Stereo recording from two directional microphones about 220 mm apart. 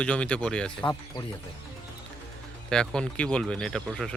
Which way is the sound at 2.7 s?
5° left (ahead or behind).